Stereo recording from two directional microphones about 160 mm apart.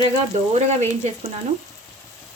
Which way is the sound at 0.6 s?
45° right (ahead or behind).